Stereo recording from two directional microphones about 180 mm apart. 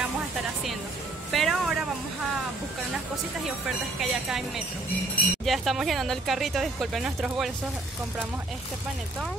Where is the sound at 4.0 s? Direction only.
Centre (ahead or behind).